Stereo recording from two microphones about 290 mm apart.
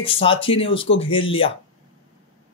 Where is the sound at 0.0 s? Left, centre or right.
Centre.